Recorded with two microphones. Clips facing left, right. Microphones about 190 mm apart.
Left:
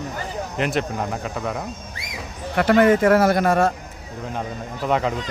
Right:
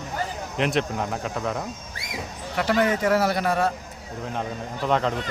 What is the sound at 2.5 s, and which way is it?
A man's voice, 55° left (ahead or behind).